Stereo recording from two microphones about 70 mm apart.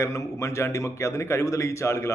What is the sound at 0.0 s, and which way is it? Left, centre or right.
A man's voice, left.